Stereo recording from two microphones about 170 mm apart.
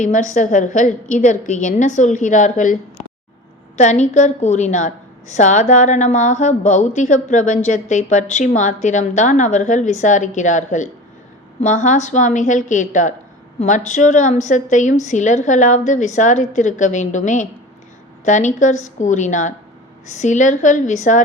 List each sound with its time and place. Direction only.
0.0 s a woman's voice: 45° left (ahead or behind)
3.8 s a woman's voice: 45° left (ahead or behind)